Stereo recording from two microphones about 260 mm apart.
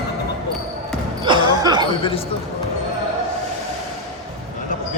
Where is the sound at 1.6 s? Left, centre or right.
Centre.